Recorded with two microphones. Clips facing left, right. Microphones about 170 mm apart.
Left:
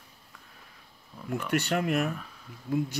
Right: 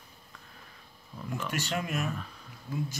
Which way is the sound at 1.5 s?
60° left (ahead or behind).